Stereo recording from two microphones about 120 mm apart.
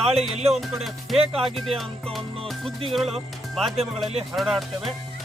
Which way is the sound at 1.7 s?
Centre (ahead or behind).